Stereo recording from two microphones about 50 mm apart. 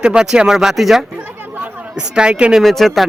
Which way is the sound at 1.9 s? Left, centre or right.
Centre.